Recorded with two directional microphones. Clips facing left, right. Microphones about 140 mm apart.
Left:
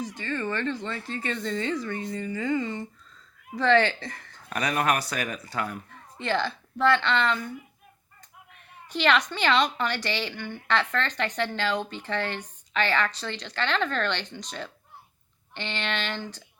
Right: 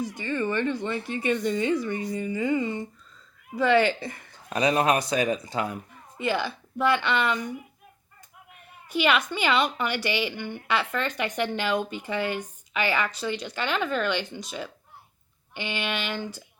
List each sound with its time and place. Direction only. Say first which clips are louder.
0.0 s a woman's voice: right 3 dB; 15° right (ahead or behind)
8.9 s a woman's voice: even; 10° right (ahead or behind)